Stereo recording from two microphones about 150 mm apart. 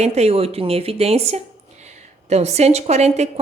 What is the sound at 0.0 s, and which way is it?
A woman's voice, 45° right (ahead or behind).